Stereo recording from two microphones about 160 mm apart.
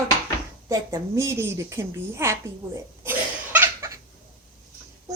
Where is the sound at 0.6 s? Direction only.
20° right (ahead or behind).